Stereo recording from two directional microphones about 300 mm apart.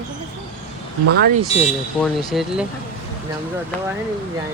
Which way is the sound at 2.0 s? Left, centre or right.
Centre.